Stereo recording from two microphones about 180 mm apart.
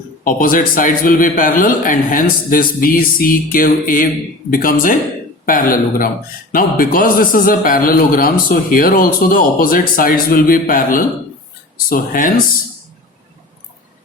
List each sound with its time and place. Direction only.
0.3 s a man's voice: 50° left (ahead or behind)